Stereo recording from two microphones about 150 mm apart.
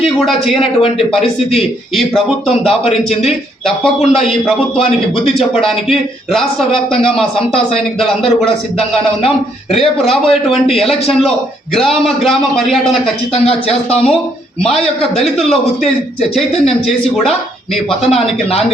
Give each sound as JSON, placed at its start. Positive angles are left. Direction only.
{"t": 0.5, "sound": "speech", "side_deg": 40}
{"t": 2.6, "sound": "a man's voice", "side_deg": 45}
{"t": 4.2, "sound": "a man's voice", "side_deg": 0}
{"t": 5.4, "sound": "speech", "side_deg": 40}
{"t": 5.9, "sound": "a man's voice", "side_deg": 0}
{"t": 7.3, "sound": "speech", "side_deg": 40}
{"t": 10.1, "sound": "a man's voice", "side_deg": 0}
{"t": 11.7, "sound": "a man's voice", "side_deg": 0}
{"t": 13.3, "sound": "speech", "side_deg": 40}
{"t": 14.7, "sound": "a man's voice", "side_deg": 0}